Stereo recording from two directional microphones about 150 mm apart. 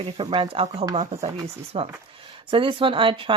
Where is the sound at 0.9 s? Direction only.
55° right (ahead or behind).